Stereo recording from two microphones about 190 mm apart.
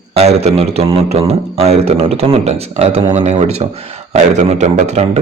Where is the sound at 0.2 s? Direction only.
35° right (ahead or behind).